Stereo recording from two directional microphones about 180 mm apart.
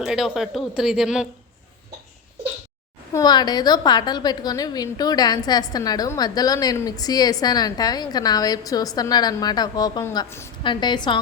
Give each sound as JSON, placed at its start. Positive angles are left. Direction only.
{"t": 0.0, "sound": "speech", "side_deg": 0}
{"t": 3.1, "sound": "a woman's voice", "side_deg": 20}
{"t": 10.6, "sound": "a woman's voice", "side_deg": 25}